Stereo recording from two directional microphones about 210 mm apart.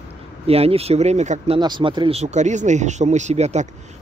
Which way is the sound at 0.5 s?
30° right (ahead or behind).